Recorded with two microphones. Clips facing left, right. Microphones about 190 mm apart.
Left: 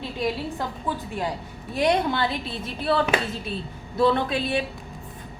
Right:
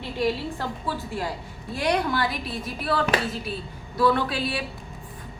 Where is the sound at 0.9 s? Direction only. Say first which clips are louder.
Left 2 dB; 20° left (ahead or behind).